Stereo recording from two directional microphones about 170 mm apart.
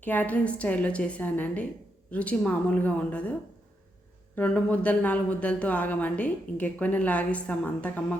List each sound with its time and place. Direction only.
0.0 s speech: 10° left (ahead or behind)
4.4 s speech: 5° left (ahead or behind)